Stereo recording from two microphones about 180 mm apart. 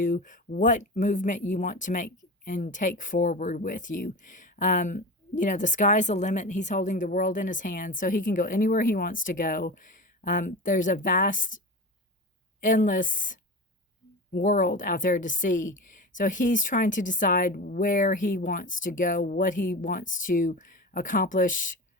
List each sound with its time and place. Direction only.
0.0 s speech: 45° left (ahead or behind)